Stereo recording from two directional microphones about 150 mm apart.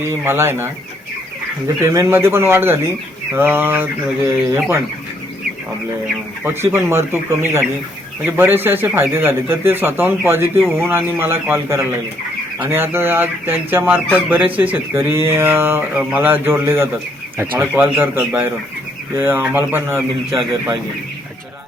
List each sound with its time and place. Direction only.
0.0 s speech: 20° right (ahead or behind)
6.4 s speech: 15° right (ahead or behind)